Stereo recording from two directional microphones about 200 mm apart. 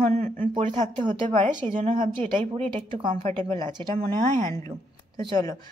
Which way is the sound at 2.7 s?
25° right (ahead or behind).